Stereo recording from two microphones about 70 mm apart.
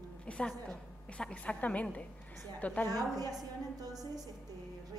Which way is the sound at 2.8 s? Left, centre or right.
Right.